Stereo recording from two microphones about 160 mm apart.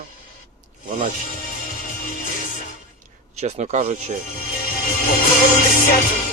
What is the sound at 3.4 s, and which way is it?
Speech, 45° right (ahead or behind).